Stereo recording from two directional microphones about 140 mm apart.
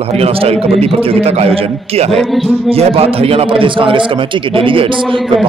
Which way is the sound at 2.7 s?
45° right (ahead or behind).